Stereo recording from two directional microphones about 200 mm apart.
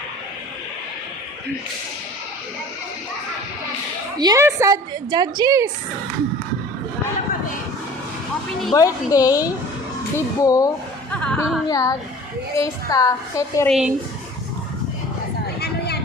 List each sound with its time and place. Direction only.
4.2 s a woman's voice: 15° right (ahead or behind)
8.7 s a woman's voice: 15° left (ahead or behind)
11.7 s a woman's voice: 15° left (ahead or behind)
13.7 s speech: 5° right (ahead or behind)